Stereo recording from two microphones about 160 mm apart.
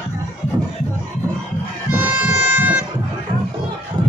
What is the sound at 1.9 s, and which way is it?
Music, 10° right (ahead or behind).